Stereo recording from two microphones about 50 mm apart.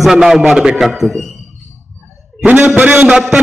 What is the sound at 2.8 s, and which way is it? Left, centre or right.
Speech, right.